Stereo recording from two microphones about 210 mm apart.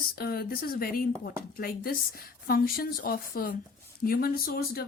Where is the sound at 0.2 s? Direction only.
45° left (ahead or behind).